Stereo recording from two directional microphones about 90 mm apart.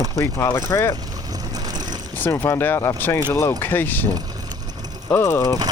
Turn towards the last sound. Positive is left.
turn(degrees=35)  # may be behind; listen again after turning